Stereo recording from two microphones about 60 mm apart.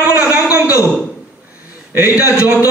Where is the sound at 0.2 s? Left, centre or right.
Right.